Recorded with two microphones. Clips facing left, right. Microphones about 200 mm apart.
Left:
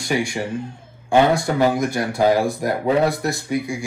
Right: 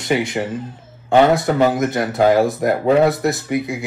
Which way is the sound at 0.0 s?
20° right (ahead or behind).